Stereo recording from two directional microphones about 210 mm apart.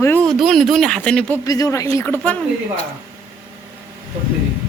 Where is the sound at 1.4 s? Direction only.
15° left (ahead or behind).